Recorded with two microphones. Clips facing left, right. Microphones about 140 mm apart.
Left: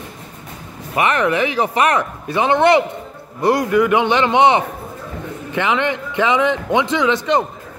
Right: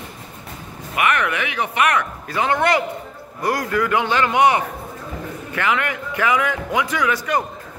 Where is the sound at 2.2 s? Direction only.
20° left (ahead or behind).